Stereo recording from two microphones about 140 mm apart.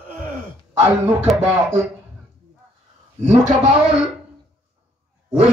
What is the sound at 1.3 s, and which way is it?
Speech, centre (ahead or behind).